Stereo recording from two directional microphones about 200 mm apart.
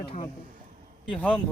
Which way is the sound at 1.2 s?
5° left (ahead or behind).